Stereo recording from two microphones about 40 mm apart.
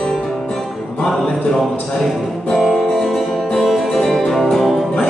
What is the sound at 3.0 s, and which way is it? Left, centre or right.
Music, centre.